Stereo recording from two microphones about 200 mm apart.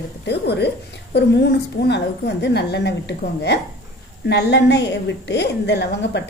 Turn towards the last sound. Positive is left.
turn(degrees=60)  # may be behind; listen again after turning